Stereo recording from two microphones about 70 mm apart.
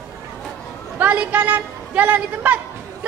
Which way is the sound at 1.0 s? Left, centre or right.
Right.